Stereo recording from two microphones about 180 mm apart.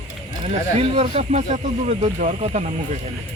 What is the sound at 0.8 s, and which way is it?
Speech, 35° right (ahead or behind).